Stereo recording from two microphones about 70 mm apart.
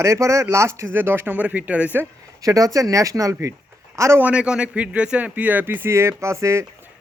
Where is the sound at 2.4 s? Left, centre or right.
Right.